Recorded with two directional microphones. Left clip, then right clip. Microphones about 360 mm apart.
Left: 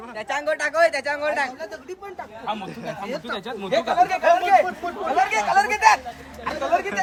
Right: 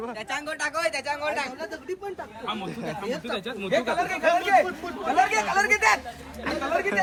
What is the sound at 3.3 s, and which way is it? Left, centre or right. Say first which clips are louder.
Speech: left 3 dB; centre.